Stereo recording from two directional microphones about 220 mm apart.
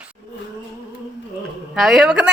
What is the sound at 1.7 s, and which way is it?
Speech, centre (ahead or behind).